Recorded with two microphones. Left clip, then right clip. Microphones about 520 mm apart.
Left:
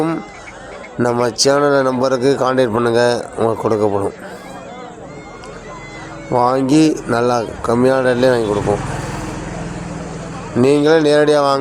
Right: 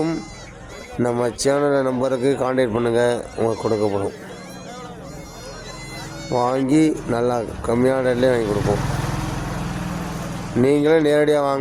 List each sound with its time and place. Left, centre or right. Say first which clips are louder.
1.0 s speech: left 6 dB; right
6.3 s speech: left 5 dB; right
10.6 s speech: left 4 dB; right